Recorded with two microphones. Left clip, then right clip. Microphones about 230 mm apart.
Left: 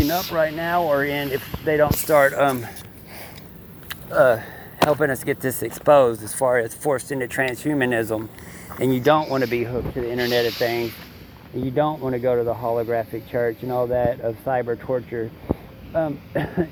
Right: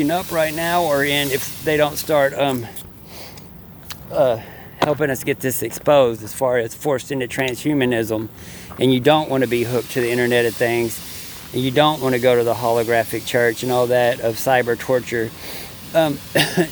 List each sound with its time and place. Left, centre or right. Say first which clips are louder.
0.0 s speech: right 2 dB; right
4.8 s speech: even; left
5.4 s speech: right 2 dB; centre
7.1 s speech: right 1 dB; right
9.0 s speech: right 1 dB; right